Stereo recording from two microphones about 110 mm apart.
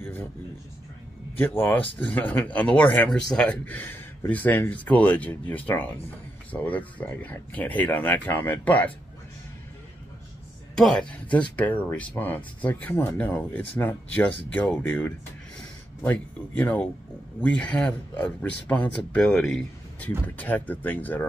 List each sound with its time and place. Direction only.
0.0 s a sound: 20° left (ahead or behind)
1.4 s speech: 20° left (ahead or behind)
3.1 s speech: 5° left (ahead or behind)
10.8 s speech: 10° left (ahead or behind)